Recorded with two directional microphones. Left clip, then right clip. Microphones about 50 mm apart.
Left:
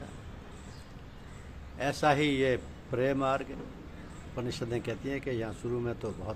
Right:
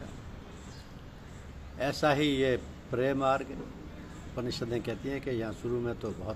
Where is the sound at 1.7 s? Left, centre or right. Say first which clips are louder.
Left 1 dB; left.